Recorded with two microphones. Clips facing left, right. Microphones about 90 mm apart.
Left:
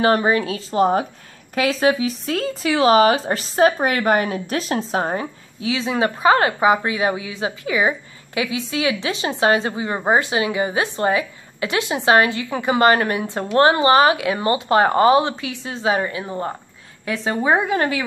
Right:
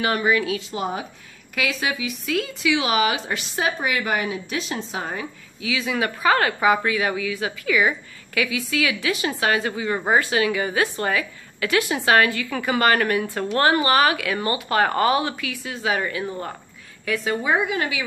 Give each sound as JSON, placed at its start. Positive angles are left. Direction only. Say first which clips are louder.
{"t": 0.0, "sound": "a woman's voice", "louder": "left 4 dB", "side_deg": 35}